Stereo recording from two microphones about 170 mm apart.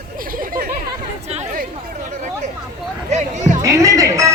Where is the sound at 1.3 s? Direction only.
55° right (ahead or behind).